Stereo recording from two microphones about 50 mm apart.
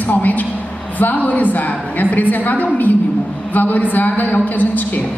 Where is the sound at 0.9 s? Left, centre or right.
Left.